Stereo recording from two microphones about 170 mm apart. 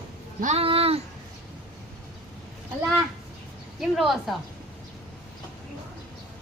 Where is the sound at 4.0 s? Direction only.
Centre (ahead or behind).